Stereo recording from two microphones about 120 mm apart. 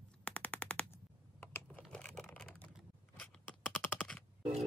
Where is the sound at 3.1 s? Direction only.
15° left (ahead or behind).